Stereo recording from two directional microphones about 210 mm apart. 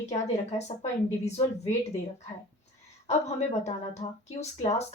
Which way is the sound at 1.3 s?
30° left (ahead or behind).